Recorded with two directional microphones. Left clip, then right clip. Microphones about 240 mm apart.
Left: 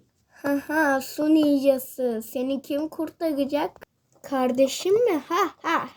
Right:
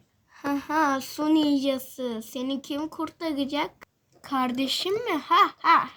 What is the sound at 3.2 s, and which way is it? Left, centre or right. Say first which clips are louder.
Speech: left 4 dB; right.